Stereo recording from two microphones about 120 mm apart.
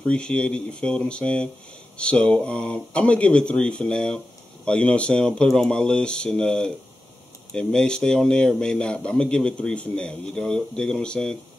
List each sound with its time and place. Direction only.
0.0 s speech: 5° left (ahead or behind)